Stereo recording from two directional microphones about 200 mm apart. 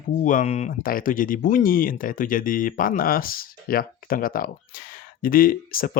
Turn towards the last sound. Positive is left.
turn(degrees=45)  # may be behind; listen again after turning